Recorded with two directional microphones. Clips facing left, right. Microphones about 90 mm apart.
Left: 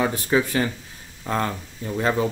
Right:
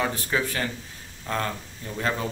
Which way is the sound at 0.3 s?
25° left (ahead or behind).